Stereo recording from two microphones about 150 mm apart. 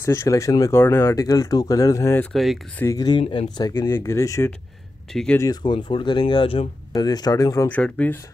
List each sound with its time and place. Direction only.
0.0 s speech: 20° left (ahead or behind)
2.3 s speech: centre (ahead or behind)
2.8 s speech: 25° left (ahead or behind)
5.1 s speech: 5° left (ahead or behind)
5.4 s speech: 25° left (ahead or behind)
6.9 s speech: 25° left (ahead or behind)
7.6 s speech: 10° left (ahead or behind)